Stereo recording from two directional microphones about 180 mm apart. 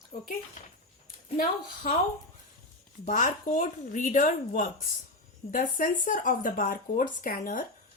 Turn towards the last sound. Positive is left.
turn(degrees=50)  # may be behind; listen again after turning